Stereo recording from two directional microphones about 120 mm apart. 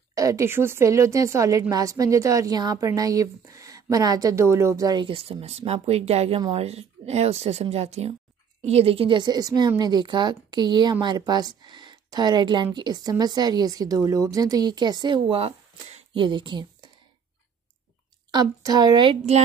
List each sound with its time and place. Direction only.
0.1 s speech: 30° right (ahead or behind)
5.0 s a woman's voice: 50° right (ahead or behind)
18.3 s speech: 35° right (ahead or behind)